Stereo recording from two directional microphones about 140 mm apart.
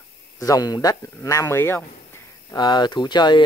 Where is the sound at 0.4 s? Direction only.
25° left (ahead or behind).